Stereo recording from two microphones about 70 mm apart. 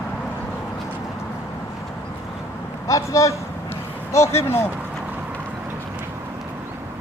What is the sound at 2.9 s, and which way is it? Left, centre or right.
Speech, left.